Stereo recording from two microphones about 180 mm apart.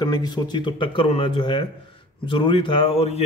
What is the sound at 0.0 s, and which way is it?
Speech, 25° left (ahead or behind).